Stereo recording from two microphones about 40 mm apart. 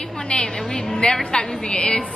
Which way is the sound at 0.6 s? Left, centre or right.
Centre.